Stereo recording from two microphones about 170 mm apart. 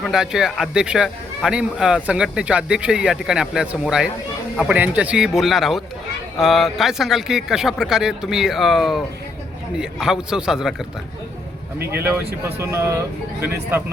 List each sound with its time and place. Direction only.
0.0 s a man's voice: centre (ahead or behind)
10.0 s a man's voice: 5° right (ahead or behind)
11.9 s speech: 15° right (ahead or behind)